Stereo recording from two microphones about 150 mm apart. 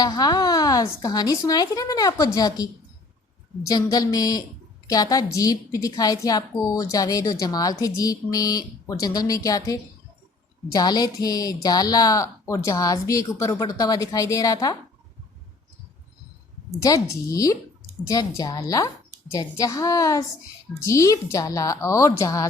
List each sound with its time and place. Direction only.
0.0 s a woman's voice: 25° left (ahead or behind)
3.7 s a woman's voice: 25° left (ahead or behind)
16.8 s a woman's voice: 20° left (ahead or behind)